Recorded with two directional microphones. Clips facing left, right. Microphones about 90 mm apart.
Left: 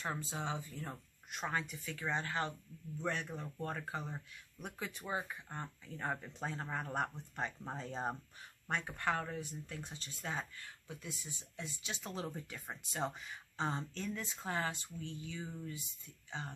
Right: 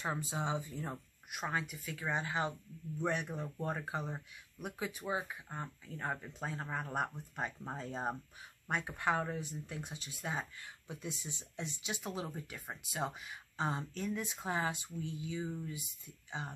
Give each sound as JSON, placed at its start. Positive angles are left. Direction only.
{"t": 0.0, "sound": "speech", "side_deg": -15}
{"t": 1.3, "sound": "speech", "side_deg": -10}